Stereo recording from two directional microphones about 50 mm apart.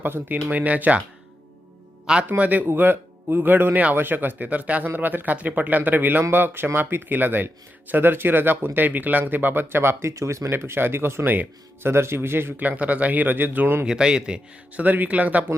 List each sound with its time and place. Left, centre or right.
0.0 s a man's voice: right
2.3 s a man's voice: right
2.6 s a man's voice: right
10.1 s speech: right
10.5 s speech: right
12.5 s a man's voice: right
13.8 s speech: centre
14.8 s a man's voice: right